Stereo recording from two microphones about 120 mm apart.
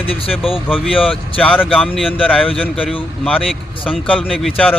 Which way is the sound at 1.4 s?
10° left (ahead or behind).